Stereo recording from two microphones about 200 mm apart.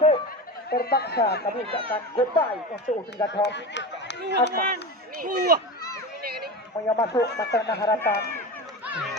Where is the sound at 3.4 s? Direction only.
60° left (ahead or behind).